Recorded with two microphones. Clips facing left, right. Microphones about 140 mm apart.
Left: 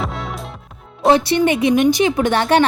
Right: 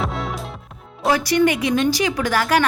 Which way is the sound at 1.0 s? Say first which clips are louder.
Left 3 dB; 25° left (ahead or behind).